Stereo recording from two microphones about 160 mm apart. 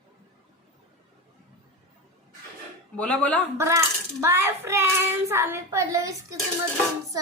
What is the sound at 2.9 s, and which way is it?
Speech, 10° left (ahead or behind).